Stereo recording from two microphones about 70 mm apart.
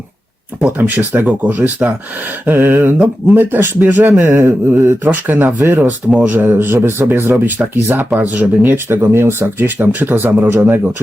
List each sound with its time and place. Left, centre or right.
0.6 s speech: right